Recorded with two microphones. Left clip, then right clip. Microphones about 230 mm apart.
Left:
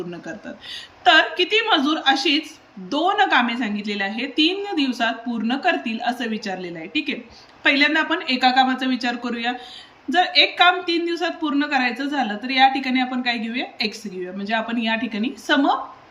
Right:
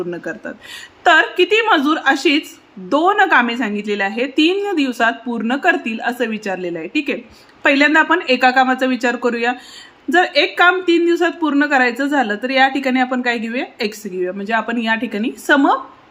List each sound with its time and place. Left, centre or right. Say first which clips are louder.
0.1 s speech: right 8 dB; centre